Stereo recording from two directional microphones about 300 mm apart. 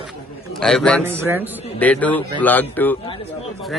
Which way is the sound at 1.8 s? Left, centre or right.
Centre.